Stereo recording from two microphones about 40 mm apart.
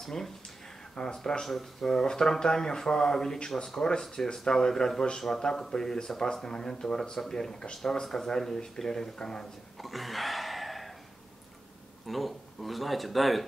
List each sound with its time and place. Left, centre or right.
0.0 s speech: centre
1.1 s speech: centre
1.4 s speech: centre
9.8 s a sound: centre
12.1 s speech: centre